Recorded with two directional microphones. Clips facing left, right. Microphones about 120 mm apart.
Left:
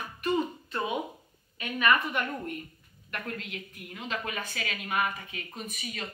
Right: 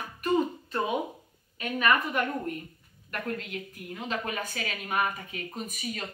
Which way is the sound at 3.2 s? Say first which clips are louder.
Right 6 dB; 40° right (ahead or behind).